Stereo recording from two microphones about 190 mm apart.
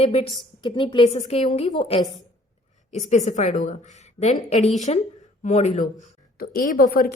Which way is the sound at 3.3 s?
40° left (ahead or behind).